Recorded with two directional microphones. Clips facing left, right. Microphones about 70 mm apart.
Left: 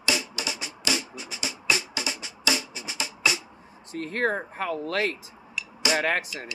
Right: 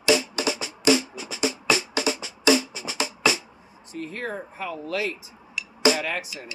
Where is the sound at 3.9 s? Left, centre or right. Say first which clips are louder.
Left 5 dB; left.